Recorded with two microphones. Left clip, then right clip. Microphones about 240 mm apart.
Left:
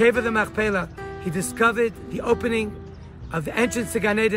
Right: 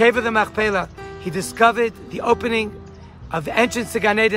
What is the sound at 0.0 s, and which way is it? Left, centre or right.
Speech, right.